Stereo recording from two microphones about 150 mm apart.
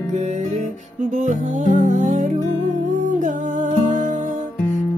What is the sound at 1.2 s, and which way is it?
Music, 60° right (ahead or behind).